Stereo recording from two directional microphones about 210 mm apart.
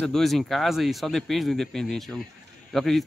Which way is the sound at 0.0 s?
Centre (ahead or behind).